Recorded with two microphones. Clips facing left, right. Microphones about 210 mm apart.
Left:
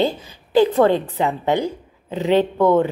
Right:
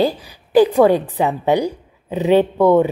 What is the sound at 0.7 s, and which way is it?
A woman's voice, 15° right (ahead or behind).